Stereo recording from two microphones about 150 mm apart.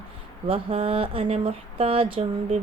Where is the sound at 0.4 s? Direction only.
35° right (ahead or behind).